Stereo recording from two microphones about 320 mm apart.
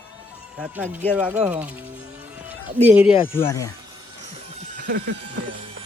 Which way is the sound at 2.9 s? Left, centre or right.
Centre.